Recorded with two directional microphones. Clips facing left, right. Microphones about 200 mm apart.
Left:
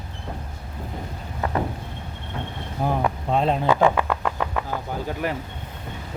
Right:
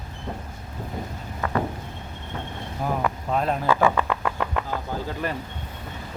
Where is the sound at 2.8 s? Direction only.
25° left (ahead or behind).